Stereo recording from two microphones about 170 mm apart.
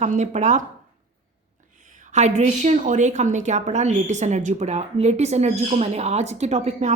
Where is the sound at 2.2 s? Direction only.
40° right (ahead or behind).